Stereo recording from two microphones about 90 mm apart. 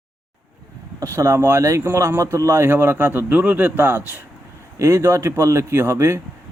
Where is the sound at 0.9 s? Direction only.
35° right (ahead or behind).